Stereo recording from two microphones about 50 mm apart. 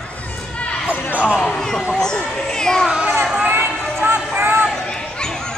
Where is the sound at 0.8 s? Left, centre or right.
Right.